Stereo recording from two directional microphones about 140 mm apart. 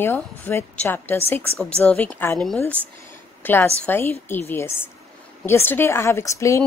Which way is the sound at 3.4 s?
15° left (ahead or behind).